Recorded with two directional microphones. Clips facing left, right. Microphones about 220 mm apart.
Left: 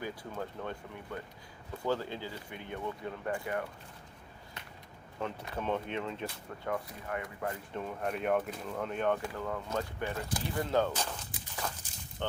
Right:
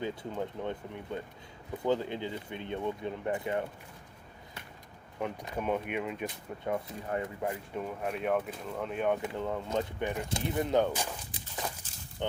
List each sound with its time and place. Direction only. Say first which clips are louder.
0.0 s speech: right 4 dB; 20° right (ahead or behind)
5.2 s speech: right 2 dB; 15° right (ahead or behind)
7.4 s speech: right 2 dB; 5° right (ahead or behind)
9.1 s speech: right 3 dB; 20° right (ahead or behind)
11.6 s walk: even; 15° right (ahead or behind)